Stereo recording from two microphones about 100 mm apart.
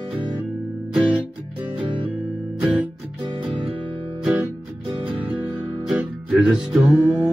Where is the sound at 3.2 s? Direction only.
55° right (ahead or behind).